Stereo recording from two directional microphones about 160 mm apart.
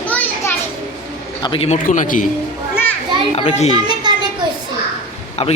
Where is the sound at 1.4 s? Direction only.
35° left (ahead or behind).